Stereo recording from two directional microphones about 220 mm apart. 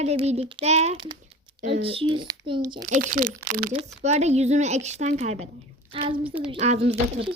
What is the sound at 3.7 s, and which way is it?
Speech, 30° right (ahead or behind).